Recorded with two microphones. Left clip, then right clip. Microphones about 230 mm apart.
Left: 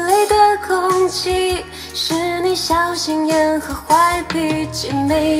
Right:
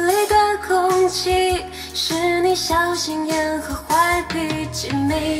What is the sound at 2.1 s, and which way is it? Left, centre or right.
Music, right.